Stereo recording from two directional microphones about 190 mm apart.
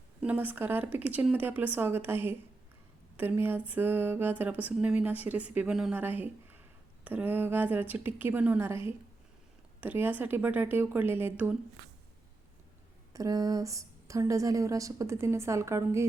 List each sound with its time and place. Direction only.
0.2 s speech: 10° right (ahead or behind)
9.8 s speech: 10° right (ahead or behind)
13.1 s speech: 20° right (ahead or behind)